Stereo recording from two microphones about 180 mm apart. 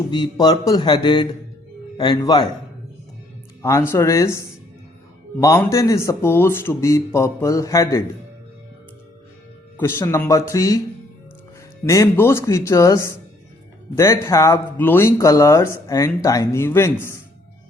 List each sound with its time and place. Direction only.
0.1 s speech: 25° left (ahead or behind)
3.6 s speech: 15° left (ahead or behind)
9.7 s speech: 15° left (ahead or behind)
11.9 s speech: 15° left (ahead or behind)